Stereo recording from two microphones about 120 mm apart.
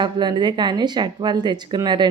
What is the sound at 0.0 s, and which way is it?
A woman's voice, 40° right (ahead or behind).